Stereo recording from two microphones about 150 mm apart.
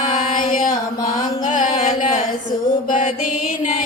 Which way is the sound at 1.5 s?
55° left (ahead or behind).